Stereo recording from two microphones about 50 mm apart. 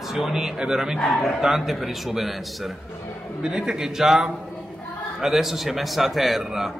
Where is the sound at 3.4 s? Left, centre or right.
Centre.